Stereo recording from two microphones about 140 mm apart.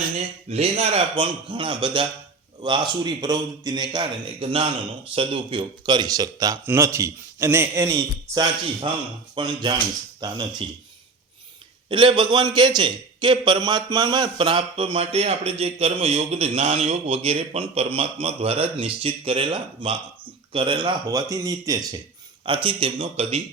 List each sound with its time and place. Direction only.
0.5 s speech: 50° right (ahead or behind)
1.1 s a man's voice: 35° right (ahead or behind)
11.9 s a man's voice: 35° right (ahead or behind)
22.4 s a man's voice: 40° right (ahead or behind)